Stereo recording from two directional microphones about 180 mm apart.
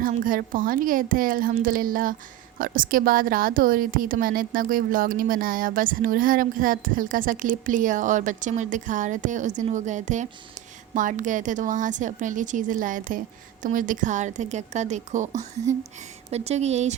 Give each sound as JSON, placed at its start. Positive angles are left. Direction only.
{"t": 0.0, "sound": "a woman's voice", "side_deg": -50}